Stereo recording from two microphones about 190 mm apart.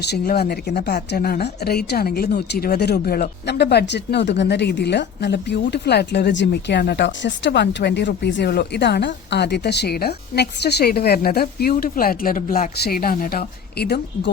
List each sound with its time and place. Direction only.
0.0 s a woman's voice: 60° left (ahead or behind)